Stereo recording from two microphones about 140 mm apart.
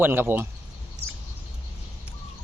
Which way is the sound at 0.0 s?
15° right (ahead or behind).